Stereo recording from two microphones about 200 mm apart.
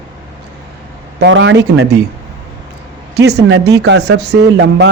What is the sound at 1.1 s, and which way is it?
Speech, 65° right (ahead or behind).